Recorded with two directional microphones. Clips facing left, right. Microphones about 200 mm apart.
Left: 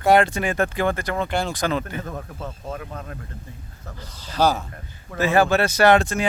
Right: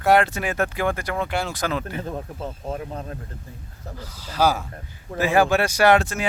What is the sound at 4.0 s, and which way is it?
Speech, 5° right (ahead or behind).